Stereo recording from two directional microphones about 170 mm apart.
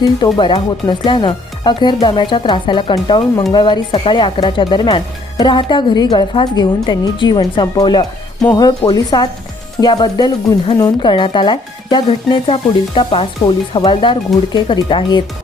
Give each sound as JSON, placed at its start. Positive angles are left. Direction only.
{"t": 0.3, "sound": "speech", "side_deg": 25}